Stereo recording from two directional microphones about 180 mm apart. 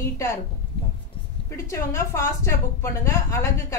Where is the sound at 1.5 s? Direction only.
15° left (ahead or behind).